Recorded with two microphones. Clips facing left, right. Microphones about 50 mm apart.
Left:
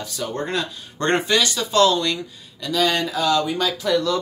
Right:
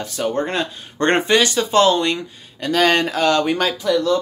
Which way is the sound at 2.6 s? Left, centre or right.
Right.